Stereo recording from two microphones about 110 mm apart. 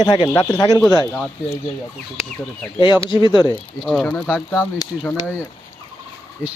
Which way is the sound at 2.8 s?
45° left (ahead or behind).